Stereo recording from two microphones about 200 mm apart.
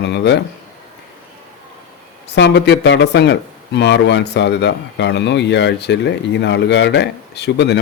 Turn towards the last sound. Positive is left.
turn(degrees=55)  # may be behind; listen again after turning